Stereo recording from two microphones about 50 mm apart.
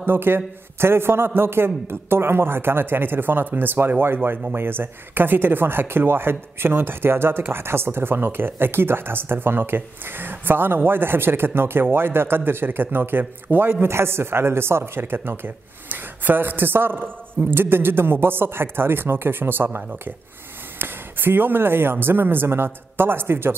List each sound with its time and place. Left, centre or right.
0.0 s speech: right